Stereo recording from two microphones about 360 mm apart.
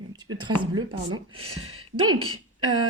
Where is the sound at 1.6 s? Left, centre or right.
Right.